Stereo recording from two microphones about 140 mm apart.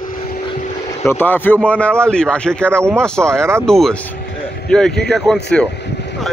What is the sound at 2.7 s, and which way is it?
Speech, 20° right (ahead or behind).